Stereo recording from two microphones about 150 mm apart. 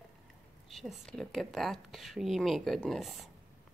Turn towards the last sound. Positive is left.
turn(degrees=0)  # may be behind; listen again after turning